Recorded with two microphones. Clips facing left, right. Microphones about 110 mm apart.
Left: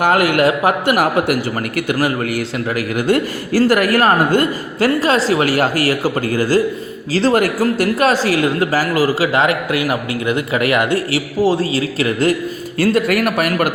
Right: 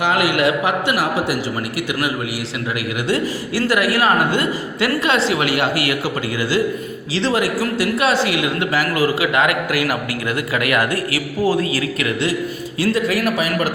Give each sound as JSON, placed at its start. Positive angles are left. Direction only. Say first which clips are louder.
{"t": 0.0, "sound": "a man's voice", "louder": "left 4 dB", "side_deg": 50}
{"t": 12.8, "sound": "a man's voice", "louder": "left 3 dB", "side_deg": 55}